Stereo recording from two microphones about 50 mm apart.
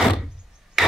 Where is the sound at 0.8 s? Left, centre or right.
Centre.